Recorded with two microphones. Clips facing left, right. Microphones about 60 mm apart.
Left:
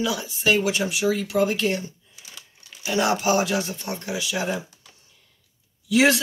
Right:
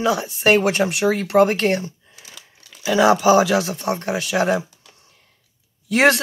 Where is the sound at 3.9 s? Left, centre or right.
Right.